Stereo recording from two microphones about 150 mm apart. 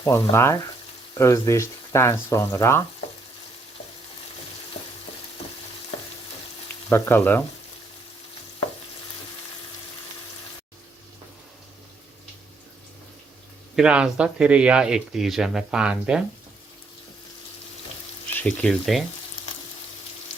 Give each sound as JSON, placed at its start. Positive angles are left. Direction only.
{"t": 0.0, "sound": "speech", "side_deg": 20}
{"t": 6.9, "sound": "speech", "side_deg": 15}
{"t": 13.7, "sound": "speech", "side_deg": -5}
{"t": 18.3, "sound": "speech", "side_deg": 10}